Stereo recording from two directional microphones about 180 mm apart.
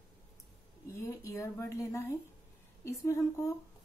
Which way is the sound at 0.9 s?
15° left (ahead or behind).